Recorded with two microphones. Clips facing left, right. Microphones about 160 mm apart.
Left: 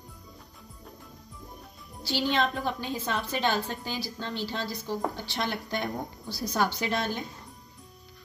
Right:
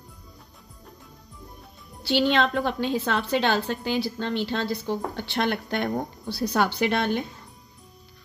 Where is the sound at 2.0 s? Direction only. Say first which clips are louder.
Right 5 dB; 65° right (ahead or behind).